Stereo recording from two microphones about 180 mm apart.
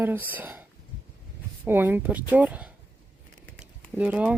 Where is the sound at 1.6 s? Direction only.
10° right (ahead or behind).